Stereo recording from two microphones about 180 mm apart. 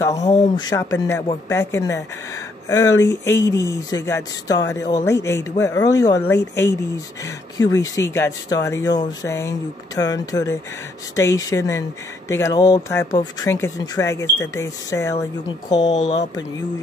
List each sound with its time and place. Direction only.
0.0 s speech: 20° left (ahead or behind)
3.3 s speech: 15° left (ahead or behind)
15.9 s speech: 40° left (ahead or behind)